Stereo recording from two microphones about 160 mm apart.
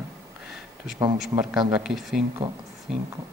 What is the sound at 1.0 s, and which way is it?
Speech, 20° right (ahead or behind).